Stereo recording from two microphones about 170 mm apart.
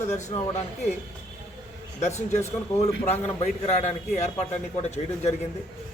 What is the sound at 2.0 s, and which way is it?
A man's voice, 40° left (ahead or behind).